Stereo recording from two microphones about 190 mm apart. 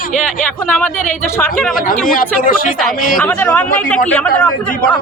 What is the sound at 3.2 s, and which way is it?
Speech, 10° left (ahead or behind).